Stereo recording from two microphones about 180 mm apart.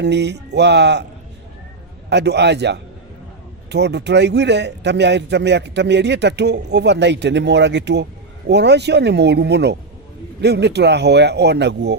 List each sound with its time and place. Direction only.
0.0 s a man's voice: 70° right (ahead or behind)
2.0 s a man's voice: 70° right (ahead or behind)